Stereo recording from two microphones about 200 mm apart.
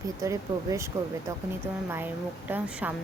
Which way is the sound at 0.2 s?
15° right (ahead or behind).